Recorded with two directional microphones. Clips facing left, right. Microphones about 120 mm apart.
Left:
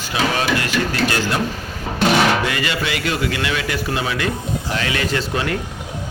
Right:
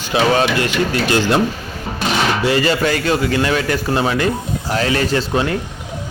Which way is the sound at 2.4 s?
35° right (ahead or behind).